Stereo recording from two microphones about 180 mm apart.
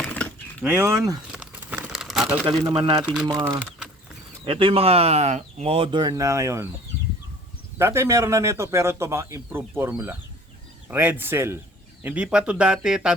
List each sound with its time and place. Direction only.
0.0 s a sound: 10° left (ahead or behind)
0.6 s a man's voice: 10° right (ahead or behind)
1.3 s crumpling: 5° right (ahead or behind)
2.5 s speech: 25° right (ahead or behind)
3.0 s speech: 5° right (ahead or behind)
3.3 s speech: 20° right (ahead or behind)
7.8 s a man's voice: 15° right (ahead or behind)